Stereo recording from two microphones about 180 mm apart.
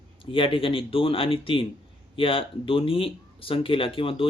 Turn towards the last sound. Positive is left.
turn(degrees=30)  # may be behind; listen again after turning